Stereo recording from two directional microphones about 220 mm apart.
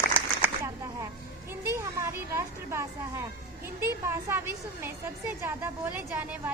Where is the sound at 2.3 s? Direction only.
10° right (ahead or behind).